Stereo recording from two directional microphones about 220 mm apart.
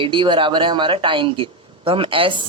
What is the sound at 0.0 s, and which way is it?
Speech, 20° right (ahead or behind).